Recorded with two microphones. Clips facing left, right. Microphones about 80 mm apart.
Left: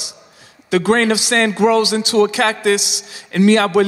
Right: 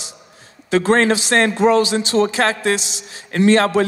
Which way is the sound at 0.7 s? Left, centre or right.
Right.